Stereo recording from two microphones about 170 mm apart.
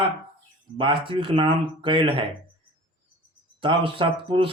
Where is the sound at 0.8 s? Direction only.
30° right (ahead or behind).